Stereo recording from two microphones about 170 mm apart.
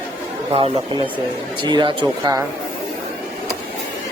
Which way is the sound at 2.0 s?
15° right (ahead or behind).